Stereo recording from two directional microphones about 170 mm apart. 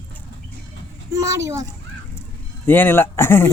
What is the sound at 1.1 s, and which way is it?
Speech, 20° right (ahead or behind).